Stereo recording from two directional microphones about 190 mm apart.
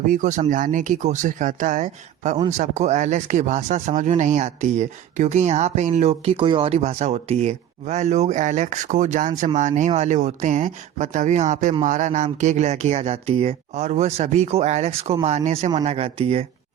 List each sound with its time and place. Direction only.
0.1 s speech: 40° right (ahead or behind)